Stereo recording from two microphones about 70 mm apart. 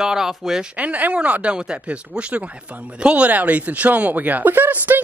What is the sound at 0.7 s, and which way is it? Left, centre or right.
Speech, right.